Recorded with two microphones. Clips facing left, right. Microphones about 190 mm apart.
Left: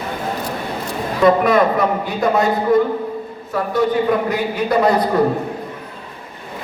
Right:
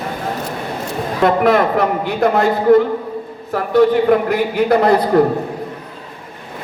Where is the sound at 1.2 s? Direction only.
60° right (ahead or behind).